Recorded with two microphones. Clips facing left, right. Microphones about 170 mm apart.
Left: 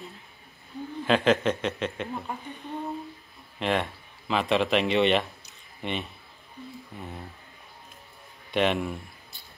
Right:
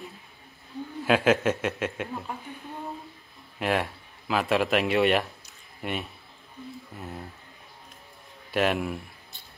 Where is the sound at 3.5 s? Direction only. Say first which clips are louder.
Even; 5° right (ahead or behind).